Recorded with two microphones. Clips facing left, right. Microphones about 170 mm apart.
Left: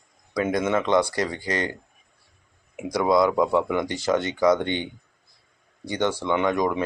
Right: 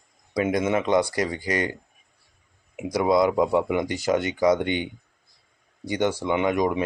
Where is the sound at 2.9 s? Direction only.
15° right (ahead or behind).